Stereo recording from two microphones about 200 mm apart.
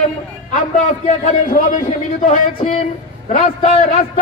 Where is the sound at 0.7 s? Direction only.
40° left (ahead or behind).